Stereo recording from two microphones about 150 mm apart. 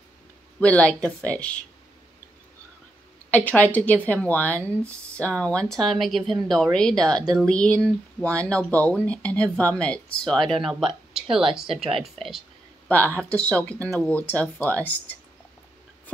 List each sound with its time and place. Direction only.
0.6 s speech: 10° left (ahead or behind)
3.3 s speech: 10° left (ahead or behind)
11.7 s speech: 40° right (ahead or behind)
12.0 s a sound: centre (ahead or behind)
12.9 s speech: 10° left (ahead or behind)